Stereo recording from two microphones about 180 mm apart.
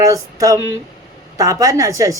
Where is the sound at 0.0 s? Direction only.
20° right (ahead or behind).